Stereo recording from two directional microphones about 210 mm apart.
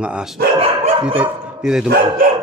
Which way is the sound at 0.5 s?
25° right (ahead or behind).